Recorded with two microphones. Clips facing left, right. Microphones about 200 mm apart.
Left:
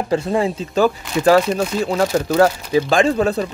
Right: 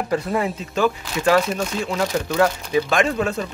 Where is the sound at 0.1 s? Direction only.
25° left (ahead or behind).